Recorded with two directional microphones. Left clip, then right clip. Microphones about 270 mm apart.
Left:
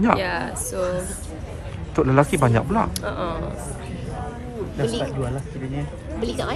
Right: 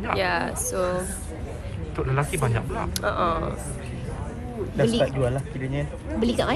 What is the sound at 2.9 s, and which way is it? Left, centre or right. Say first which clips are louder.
Speech: right 3 dB; centre.